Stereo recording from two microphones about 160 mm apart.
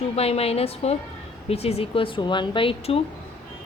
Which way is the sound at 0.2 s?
40° left (ahead or behind).